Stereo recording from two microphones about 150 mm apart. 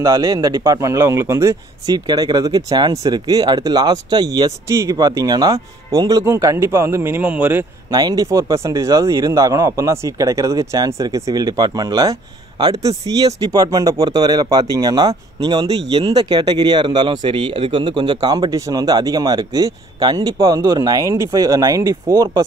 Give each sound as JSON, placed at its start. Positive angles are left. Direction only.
{"t": 0.0, "sound": "speech", "side_deg": -20}
{"t": 7.9, "sound": "speech", "side_deg": -25}